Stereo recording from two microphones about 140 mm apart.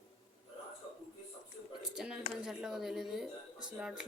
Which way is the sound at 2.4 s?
5° right (ahead or behind).